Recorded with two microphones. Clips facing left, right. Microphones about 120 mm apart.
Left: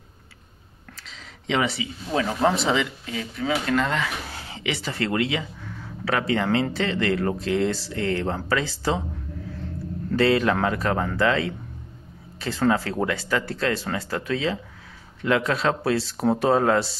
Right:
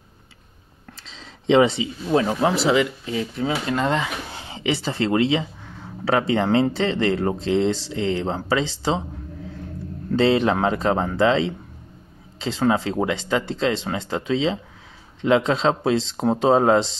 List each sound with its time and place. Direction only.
0.9 s speech: 30° right (ahead or behind)
2.4 s speech: 5° right (ahead or behind)
3.3 s speech: 25° right (ahead or behind)
10.1 s speech: 25° right (ahead or behind)